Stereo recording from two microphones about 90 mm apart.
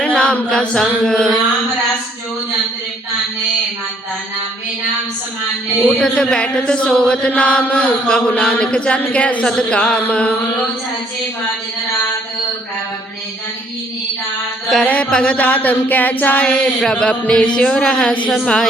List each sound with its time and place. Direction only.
0.0 s a sound: 10° left (ahead or behind)
5.8 s chant: 10° left (ahead or behind)
14.8 s chant: 15° left (ahead or behind)
18.3 s a woman's voice: 5° left (ahead or behind)